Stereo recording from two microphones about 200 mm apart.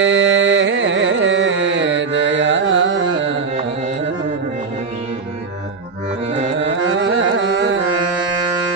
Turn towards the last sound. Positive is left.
turn(degrees=-65)  # may be behind; listen again after turning